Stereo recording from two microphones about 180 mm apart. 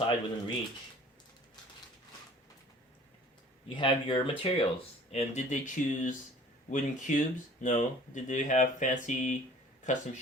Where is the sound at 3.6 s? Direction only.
30° left (ahead or behind).